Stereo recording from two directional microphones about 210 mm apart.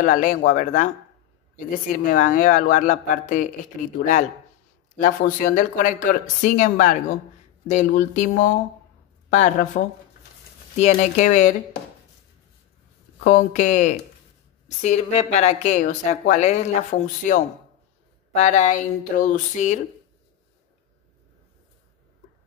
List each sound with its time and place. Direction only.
0.0 s speech: 40° left (ahead or behind)
10.8 s speech: 35° left (ahead or behind)
13.2 s speech: 35° left (ahead or behind)